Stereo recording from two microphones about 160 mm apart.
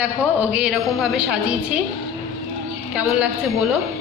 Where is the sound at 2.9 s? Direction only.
5° right (ahead or behind).